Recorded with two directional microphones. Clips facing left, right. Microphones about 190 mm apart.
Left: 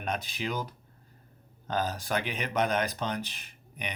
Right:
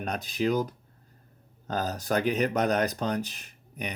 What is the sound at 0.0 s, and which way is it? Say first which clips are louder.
Speech: right 5 dB; 40° right (ahead or behind).